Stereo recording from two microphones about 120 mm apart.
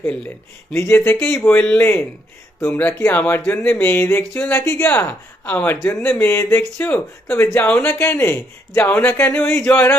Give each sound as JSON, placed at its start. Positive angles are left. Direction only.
{"t": 0.0, "sound": "speech", "side_deg": 10}